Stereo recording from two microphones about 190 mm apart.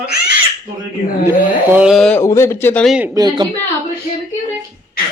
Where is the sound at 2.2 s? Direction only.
15° left (ahead or behind).